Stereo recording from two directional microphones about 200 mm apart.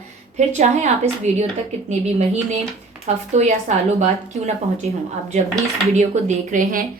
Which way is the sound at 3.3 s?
35° right (ahead or behind).